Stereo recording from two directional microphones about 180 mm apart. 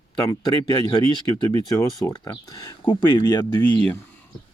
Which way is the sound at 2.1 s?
20° left (ahead or behind).